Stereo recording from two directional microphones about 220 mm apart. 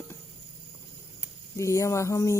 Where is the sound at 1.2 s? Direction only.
15° left (ahead or behind).